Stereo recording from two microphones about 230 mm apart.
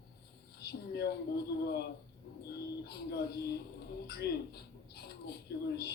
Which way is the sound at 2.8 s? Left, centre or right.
Left.